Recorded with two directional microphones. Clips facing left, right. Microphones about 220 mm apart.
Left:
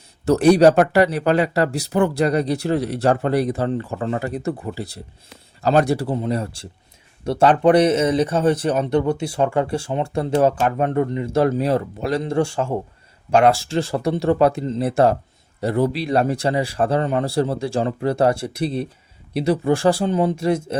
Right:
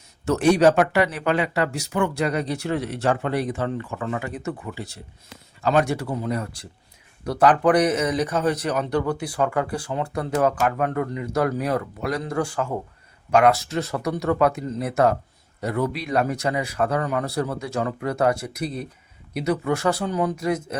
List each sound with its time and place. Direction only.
0.3 s speech: 35° left (ahead or behind)